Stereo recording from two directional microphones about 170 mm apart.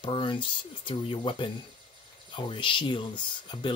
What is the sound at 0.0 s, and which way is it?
Speech, 30° left (ahead or behind).